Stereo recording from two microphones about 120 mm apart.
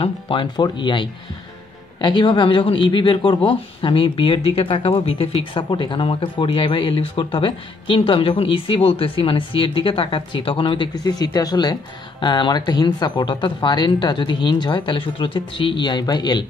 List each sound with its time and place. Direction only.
0.0 s speech: 45° left (ahead or behind)